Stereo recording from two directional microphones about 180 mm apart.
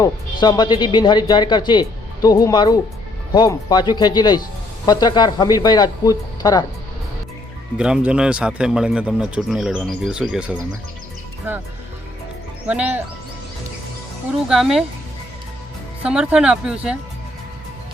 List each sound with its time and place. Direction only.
0.0 s speech: 25° left (ahead or behind)
7.8 s speech: 5° right (ahead or behind)
12.6 s speech: 10° right (ahead or behind)
14.4 s speech: centre (ahead or behind)
16.0 s speech: 5° right (ahead or behind)